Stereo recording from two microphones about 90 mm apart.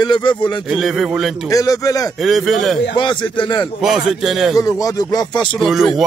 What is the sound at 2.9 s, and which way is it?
Speech, 60° left (ahead or behind).